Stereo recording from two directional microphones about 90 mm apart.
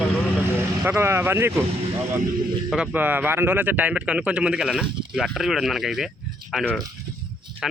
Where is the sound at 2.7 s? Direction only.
15° right (ahead or behind).